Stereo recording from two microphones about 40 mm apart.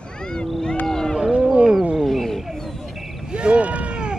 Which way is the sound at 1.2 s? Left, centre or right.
Right.